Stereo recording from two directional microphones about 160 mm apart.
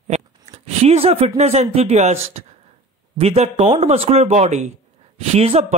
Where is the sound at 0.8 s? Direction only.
40° right (ahead or behind).